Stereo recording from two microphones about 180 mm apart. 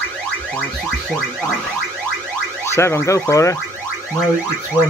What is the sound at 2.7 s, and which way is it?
Car alarm, 15° left (ahead or behind).